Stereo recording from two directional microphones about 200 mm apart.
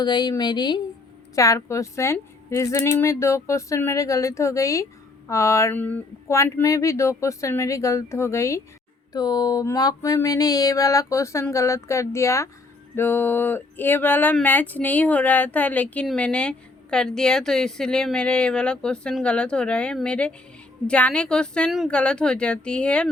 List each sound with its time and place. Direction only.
0.0 s a woman's voice: 20° left (ahead or behind); by 23.0 s 5° left (ahead or behind)